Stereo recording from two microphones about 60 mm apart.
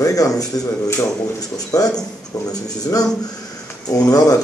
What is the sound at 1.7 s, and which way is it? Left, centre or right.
Speech, left.